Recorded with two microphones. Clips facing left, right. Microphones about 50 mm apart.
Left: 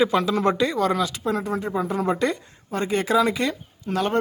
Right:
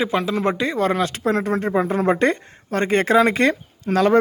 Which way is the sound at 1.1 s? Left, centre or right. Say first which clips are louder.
Right 5 dB; right.